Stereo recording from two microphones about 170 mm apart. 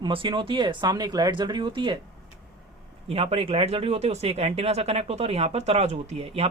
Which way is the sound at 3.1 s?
35° right (ahead or behind).